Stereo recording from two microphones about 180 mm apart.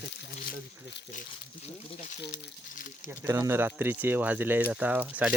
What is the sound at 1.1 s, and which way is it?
Speech, 45° left (ahead or behind).